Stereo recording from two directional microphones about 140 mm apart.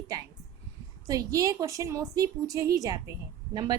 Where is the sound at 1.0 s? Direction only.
25° right (ahead or behind).